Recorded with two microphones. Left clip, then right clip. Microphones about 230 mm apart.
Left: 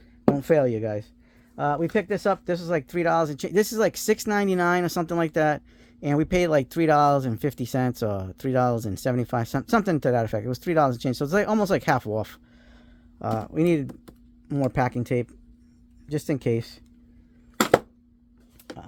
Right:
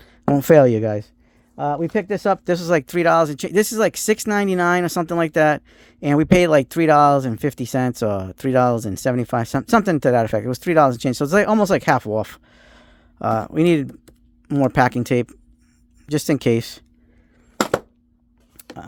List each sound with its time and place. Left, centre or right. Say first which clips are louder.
0.0 s speech: right 4 dB; right
1.5 s speech: right 3 dB; right